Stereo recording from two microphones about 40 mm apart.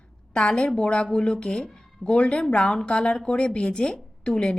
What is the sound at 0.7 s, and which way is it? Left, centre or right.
Speech, left.